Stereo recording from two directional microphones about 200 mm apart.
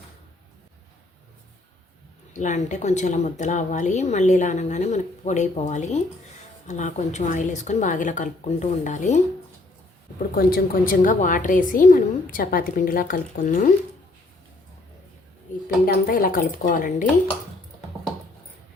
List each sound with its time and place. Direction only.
2.3 s a woman's voice: 35° left (ahead or behind)
10.3 s a woman's voice: 45° left (ahead or behind)
15.6 s a woman's voice: 45° left (ahead or behind)